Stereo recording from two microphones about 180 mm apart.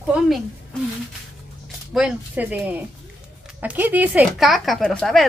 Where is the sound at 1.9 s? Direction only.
5° right (ahead or behind).